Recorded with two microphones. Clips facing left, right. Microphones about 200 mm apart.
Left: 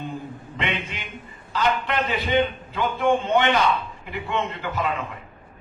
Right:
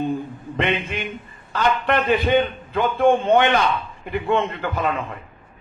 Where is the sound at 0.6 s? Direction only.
55° right (ahead or behind).